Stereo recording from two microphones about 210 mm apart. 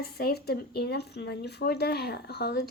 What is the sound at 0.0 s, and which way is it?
A woman's voice, 50° left (ahead or behind).